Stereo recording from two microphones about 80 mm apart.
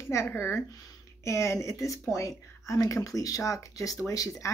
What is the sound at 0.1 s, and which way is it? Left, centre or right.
Speech, left.